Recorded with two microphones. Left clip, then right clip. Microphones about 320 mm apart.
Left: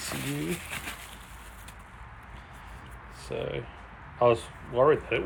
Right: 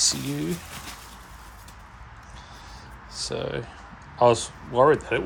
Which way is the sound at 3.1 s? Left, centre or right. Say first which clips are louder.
Right 4 dB; centre.